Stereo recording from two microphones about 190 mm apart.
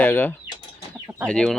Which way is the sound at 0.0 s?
10° left (ahead or behind).